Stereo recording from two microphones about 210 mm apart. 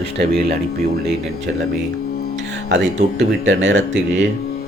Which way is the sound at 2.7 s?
60° right (ahead or behind).